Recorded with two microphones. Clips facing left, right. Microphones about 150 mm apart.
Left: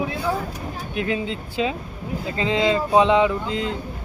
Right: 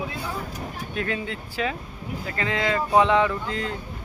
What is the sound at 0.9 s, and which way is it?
Speech, 20° left (ahead or behind).